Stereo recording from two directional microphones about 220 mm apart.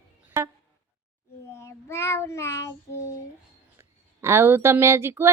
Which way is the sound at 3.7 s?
10° right (ahead or behind).